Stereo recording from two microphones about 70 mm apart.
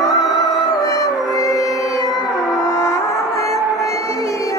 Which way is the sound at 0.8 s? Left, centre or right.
Left.